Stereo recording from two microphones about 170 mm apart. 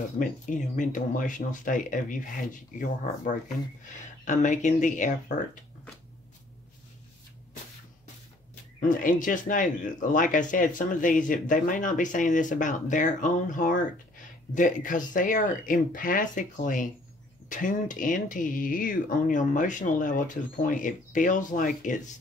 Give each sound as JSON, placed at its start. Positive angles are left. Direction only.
{"t": 0.2, "sound": "speech", "side_deg": 50}
{"t": 8.7, "sound": "speech", "side_deg": 50}